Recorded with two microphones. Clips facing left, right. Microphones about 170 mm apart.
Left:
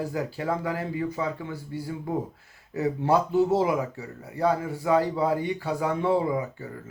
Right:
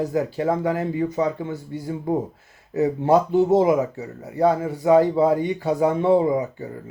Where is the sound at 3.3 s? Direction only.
20° right (ahead or behind).